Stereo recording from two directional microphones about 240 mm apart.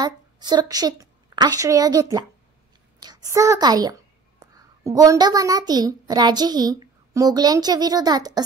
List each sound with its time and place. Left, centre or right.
0.0 s a woman's voice: centre